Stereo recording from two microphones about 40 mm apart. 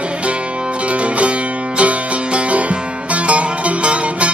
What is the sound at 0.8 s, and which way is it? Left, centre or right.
Music, right.